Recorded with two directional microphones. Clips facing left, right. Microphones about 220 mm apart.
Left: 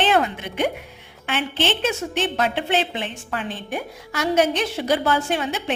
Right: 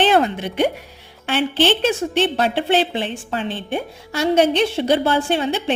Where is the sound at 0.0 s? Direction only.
35° right (ahead or behind).